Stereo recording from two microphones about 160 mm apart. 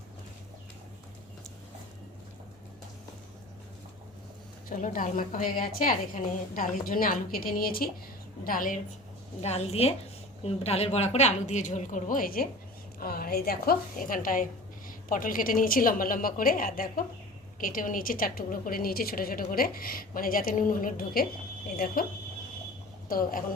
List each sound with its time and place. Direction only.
4.7 s a woman's voice: 55° left (ahead or behind)
9.4 s a woman's voice: 40° left (ahead or behind); by 22.0 s 65° left (ahead or behind)
23.0 s a woman's voice: 65° left (ahead or behind)